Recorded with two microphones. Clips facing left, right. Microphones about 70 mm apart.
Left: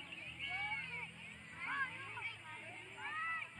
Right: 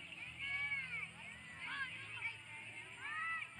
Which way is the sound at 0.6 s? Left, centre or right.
Right.